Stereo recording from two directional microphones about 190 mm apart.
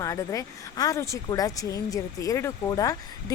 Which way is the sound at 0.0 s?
15° left (ahead or behind).